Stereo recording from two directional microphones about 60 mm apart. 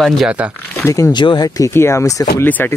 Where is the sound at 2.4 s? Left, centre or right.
Left.